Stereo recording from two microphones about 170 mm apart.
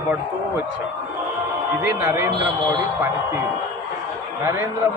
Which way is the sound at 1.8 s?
15° right (ahead or behind).